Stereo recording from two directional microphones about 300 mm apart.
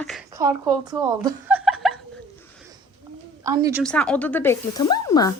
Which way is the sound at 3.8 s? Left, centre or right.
Centre.